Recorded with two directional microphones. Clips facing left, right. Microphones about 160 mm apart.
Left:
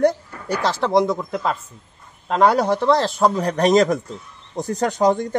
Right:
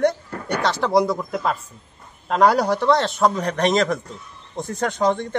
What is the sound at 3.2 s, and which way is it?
Speech, 15° left (ahead or behind).